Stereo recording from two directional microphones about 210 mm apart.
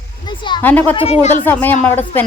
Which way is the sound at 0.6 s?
10° left (ahead or behind).